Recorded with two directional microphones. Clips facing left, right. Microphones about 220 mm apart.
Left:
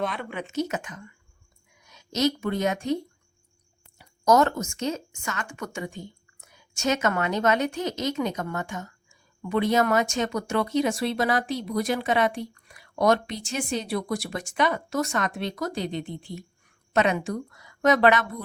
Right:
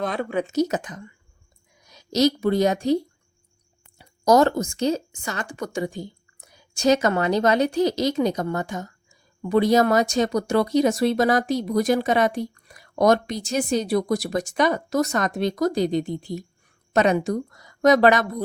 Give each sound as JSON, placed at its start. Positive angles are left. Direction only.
{"t": 0.0, "sound": "speech", "side_deg": -40}